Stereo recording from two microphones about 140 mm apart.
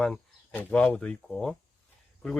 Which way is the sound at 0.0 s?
5° left (ahead or behind).